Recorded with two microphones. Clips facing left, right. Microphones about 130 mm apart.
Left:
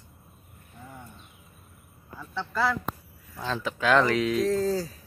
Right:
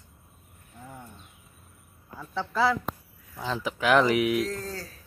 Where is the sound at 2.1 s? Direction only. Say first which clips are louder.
Right 2 dB; 10° right (ahead or behind).